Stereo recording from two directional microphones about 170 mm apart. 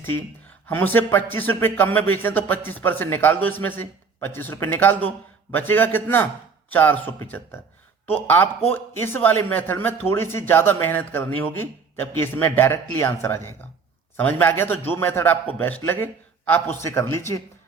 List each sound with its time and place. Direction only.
0.7 s speech: 10° left (ahead or behind)